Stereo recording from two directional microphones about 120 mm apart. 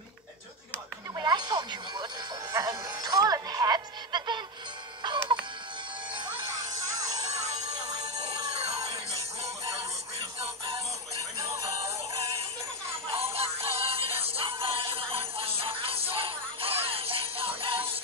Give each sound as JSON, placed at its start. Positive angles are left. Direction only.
{"t": 1.1, "sound": "music", "side_deg": -35}
{"t": 8.5, "sound": "music", "side_deg": -60}
{"t": 13.1, "sound": "music", "side_deg": -55}